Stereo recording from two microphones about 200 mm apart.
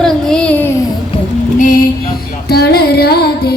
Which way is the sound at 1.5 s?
40° left (ahead or behind).